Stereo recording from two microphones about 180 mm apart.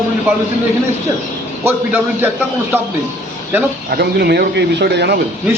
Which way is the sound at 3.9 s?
65° right (ahead or behind).